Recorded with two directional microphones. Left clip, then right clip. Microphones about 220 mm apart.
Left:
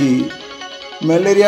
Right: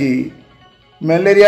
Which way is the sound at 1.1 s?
30° left (ahead or behind).